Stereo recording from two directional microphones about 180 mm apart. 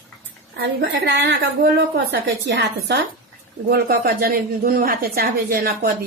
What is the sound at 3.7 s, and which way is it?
A woman's voice, 60° right (ahead or behind).